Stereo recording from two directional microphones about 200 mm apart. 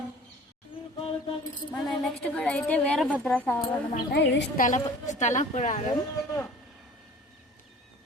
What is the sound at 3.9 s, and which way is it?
Speech, 60° left (ahead or behind).